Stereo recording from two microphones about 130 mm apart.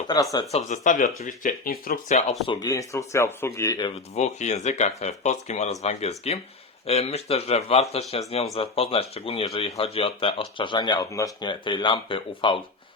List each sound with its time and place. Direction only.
0.1 s speech: 30° left (ahead or behind)
0.5 s speech: 75° left (ahead or behind); by 2.1 s 90° left
2.5 s speech: 30° left (ahead or behind)
4.1 s speech: 60° left (ahead or behind); by 12.5 s 40° left (ahead or behind)